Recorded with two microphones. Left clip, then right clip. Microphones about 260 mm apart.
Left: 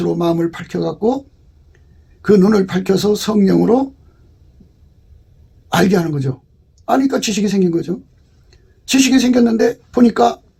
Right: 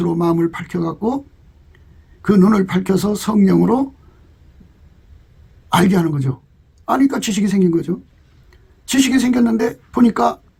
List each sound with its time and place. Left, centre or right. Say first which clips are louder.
0.0 s speech: left 1 dB; right
2.2 s speech: left 3 dB; right
5.6 s speech: left 1 dB; right